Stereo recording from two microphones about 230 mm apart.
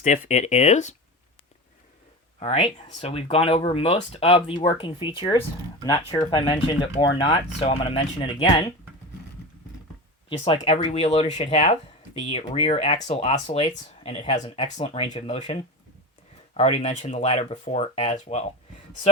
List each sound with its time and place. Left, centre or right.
0.0 s speech: left
2.4 s speech: left
10.2 s speech: left
16.6 s speech: left